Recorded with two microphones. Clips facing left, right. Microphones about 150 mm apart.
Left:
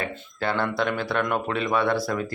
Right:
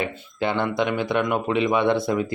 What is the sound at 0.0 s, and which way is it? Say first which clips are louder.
Speech: right 3 dB; 20° right (ahead or behind).